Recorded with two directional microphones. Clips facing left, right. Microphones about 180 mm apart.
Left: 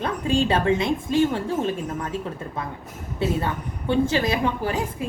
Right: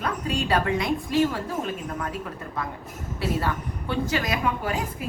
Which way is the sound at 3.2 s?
25° left (ahead or behind).